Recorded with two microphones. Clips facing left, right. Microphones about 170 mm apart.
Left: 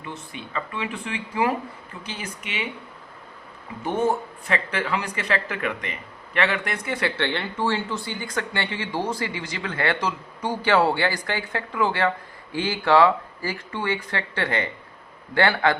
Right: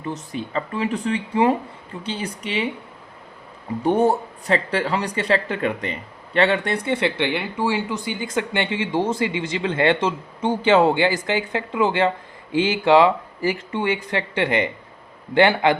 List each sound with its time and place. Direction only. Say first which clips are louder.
0.0 s speech: right 8 dB; 35° right (ahead or behind)
3.8 s speech: right 5 dB; 35° right (ahead or behind); by 15.7 s 20° right (ahead or behind)